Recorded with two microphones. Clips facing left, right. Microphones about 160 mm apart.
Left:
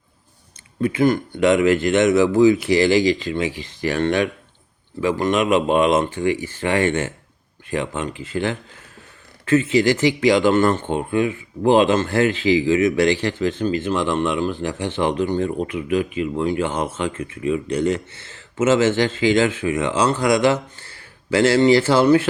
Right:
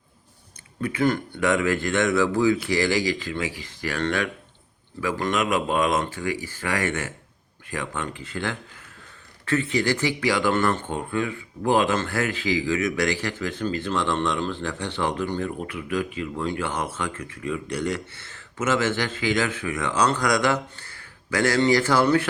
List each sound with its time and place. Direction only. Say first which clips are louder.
0.8 s speech: left 5 dB; 25° left (ahead or behind)